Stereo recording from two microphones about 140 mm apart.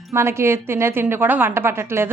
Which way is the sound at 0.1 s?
20° right (ahead or behind).